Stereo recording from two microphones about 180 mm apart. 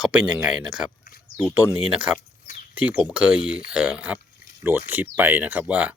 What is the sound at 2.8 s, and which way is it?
Speech, 10° right (ahead or behind).